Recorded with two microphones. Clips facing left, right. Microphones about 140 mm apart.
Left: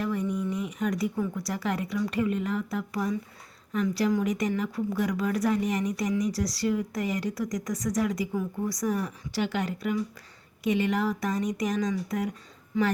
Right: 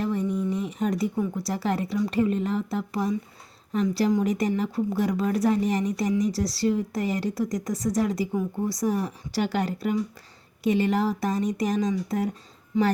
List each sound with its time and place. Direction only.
0.0 s a woman's voice: 30° right (ahead or behind)